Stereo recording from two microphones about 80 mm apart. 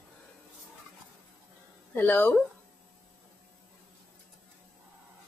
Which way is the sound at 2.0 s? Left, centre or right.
Left.